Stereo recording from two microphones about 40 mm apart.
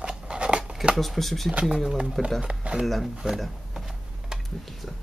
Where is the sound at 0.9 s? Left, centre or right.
Centre.